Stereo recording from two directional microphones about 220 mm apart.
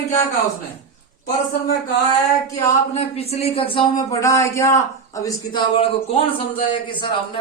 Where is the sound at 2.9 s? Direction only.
30° left (ahead or behind).